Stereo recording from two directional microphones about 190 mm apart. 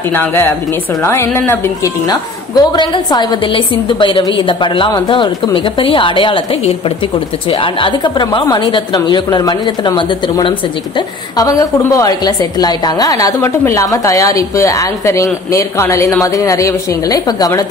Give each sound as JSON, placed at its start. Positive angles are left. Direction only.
{"t": 0.1, "sound": "a woman's voice", "side_deg": 10}